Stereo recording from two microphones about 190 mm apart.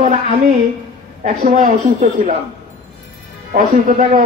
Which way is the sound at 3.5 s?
45° right (ahead or behind).